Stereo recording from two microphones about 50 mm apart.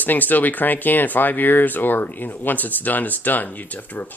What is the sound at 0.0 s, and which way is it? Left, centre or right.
Speech, left.